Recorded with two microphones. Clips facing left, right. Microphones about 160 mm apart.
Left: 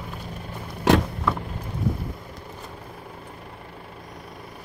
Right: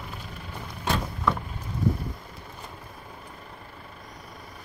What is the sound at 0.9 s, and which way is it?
Vehicle, 80° left.